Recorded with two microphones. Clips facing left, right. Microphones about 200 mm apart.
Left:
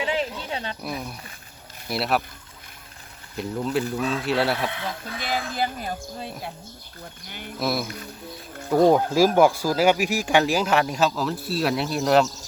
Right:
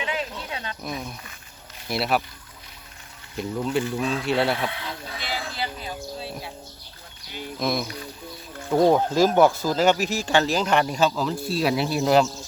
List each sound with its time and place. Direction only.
0.0 s a sound: 30° left (ahead or behind)
0.5 s speech: 30° left (ahead or behind)
0.9 s speech: 5° left (ahead or behind)
3.3 s speech: centre (ahead or behind)
5.2 s speech: 50° left (ahead or behind)
7.6 s speech: 5° left (ahead or behind)